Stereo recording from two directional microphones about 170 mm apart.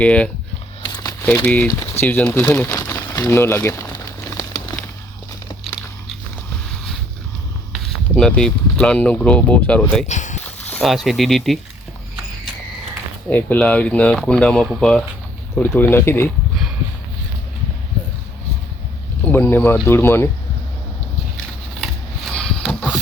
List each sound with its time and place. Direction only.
0.0 s speech: 5° left (ahead or behind)
0.8 s crumpling: 25° left (ahead or behind)
1.2 s crumpling: 10° left (ahead or behind)
7.7 s speech: 5° left (ahead or behind)
10.1 s speech: 45° left (ahead or behind)
10.8 s speech: centre (ahead or behind)
13.3 s speech: 10° left (ahead or behind)
19.2 s speech: 10° left (ahead or behind)
22.4 s a sound: 5° left (ahead or behind)